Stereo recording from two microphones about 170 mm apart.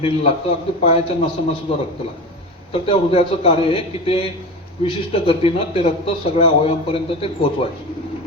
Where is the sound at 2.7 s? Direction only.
35° left (ahead or behind).